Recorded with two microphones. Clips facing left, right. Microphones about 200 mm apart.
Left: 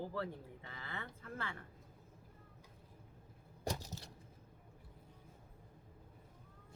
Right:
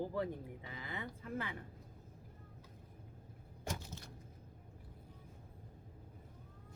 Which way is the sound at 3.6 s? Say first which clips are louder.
Left 2 dB; 40° left (ahead or behind).